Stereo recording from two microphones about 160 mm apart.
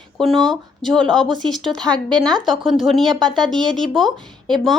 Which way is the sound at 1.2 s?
30° right (ahead or behind).